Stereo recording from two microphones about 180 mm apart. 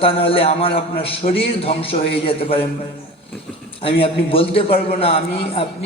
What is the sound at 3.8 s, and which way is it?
A man's voice, 30° left (ahead or behind).